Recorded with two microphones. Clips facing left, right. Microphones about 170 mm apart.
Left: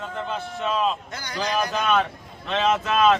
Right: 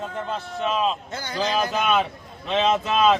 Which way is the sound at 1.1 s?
25° right (ahead or behind).